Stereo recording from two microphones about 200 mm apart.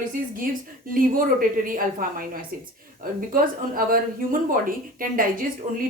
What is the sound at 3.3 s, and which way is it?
A woman's voice, 45° right (ahead or behind).